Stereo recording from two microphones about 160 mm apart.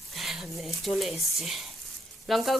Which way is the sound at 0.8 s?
Centre (ahead or behind).